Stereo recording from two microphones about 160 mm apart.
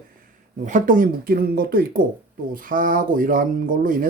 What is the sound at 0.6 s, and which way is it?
Speech, 55° right (ahead or behind).